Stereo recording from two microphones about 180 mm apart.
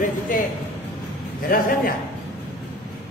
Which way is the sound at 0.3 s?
50° left (ahead or behind).